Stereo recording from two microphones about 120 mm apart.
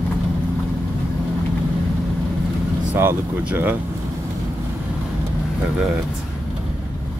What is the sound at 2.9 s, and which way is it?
Speech, 20° right (ahead or behind).